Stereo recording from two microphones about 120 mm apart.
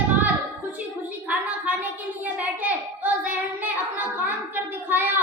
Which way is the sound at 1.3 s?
15° right (ahead or behind).